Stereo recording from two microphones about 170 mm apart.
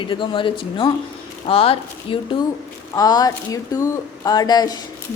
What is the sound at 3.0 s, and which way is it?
Speech, 20° left (ahead or behind).